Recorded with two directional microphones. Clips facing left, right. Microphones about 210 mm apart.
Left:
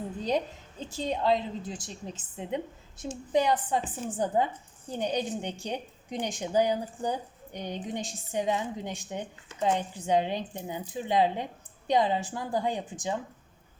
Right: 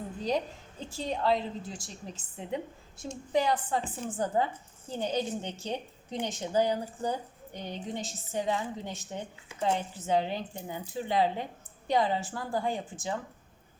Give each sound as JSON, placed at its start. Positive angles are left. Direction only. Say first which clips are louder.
{"t": 0.9, "sound": "a woman's voice", "louder": "left 2 dB", "side_deg": 20}